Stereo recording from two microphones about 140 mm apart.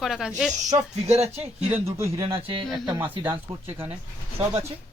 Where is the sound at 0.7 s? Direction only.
50° right (ahead or behind).